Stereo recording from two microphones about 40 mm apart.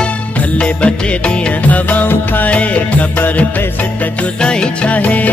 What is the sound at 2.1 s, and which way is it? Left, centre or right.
Music, left.